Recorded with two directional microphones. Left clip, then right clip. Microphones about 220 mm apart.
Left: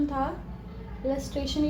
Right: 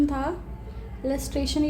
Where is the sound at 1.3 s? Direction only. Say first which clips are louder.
Right 3 dB; 55° right (ahead or behind).